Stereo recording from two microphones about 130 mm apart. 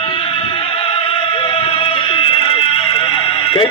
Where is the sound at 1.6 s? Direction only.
45° left (ahead or behind).